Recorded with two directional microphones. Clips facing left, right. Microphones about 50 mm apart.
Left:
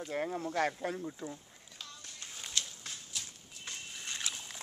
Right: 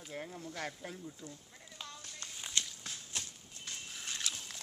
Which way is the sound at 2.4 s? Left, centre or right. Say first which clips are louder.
Even; centre.